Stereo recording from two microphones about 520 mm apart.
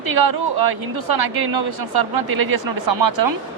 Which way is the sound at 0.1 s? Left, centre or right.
Right.